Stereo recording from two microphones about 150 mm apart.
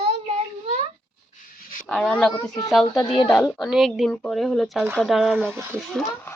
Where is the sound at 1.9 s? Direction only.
5° left (ahead or behind).